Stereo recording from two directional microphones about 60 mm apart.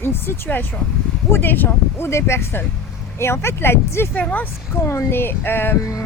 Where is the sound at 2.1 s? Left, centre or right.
Left.